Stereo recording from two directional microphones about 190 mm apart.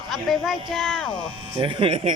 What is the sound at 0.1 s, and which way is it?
Speech, centre (ahead or behind).